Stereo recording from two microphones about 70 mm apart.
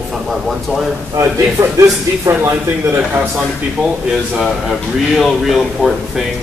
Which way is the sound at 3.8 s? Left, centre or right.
Centre.